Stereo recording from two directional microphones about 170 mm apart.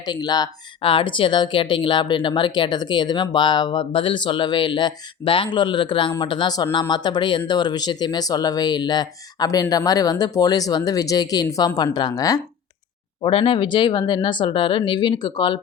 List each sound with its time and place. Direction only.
0.0 s speech: 25° left (ahead or behind)
13.2 s speech: 35° left (ahead or behind)